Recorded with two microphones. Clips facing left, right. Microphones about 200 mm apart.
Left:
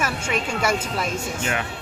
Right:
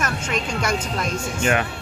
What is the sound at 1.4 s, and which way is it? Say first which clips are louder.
Speech: right 8 dB; 60° right (ahead or behind).